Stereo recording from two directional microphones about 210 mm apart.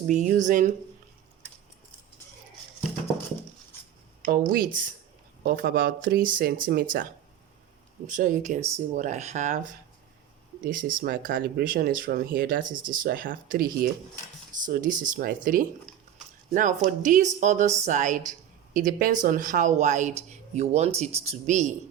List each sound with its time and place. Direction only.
0.1 s speech: 35° right (ahead or behind)
4.2 s speech: 40° right (ahead or behind)